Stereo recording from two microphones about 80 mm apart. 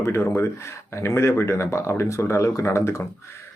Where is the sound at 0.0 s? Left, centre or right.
Left.